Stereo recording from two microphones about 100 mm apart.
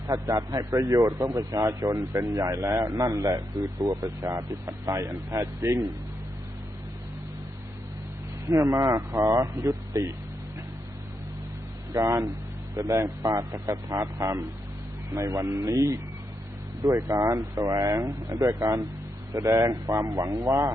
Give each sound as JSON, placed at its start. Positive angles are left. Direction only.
{"t": 0.1, "sound": "a man's voice", "side_deg": -35}
{"t": 8.4, "sound": "a man's voice", "side_deg": -30}
{"t": 11.9, "sound": "a man's voice", "side_deg": -30}